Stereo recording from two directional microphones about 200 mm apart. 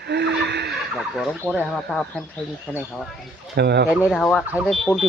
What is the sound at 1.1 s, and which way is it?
Speech, centre (ahead or behind).